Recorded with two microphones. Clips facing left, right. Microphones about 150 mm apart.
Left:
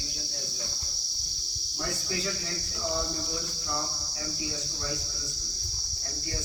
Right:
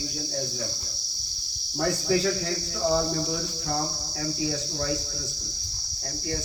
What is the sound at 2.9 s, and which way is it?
Cricket, 65° right (ahead or behind).